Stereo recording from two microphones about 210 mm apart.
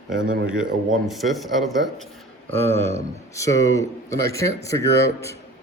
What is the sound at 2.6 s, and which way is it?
Speech, 10° left (ahead or behind).